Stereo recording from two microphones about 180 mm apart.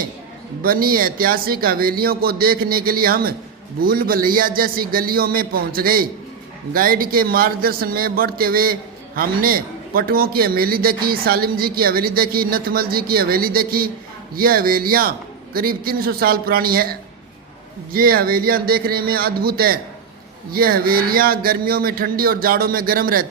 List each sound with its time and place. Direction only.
0.6 s speech: 55° right (ahead or behind)